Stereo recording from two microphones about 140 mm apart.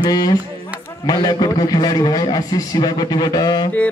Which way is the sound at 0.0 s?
30° left (ahead or behind).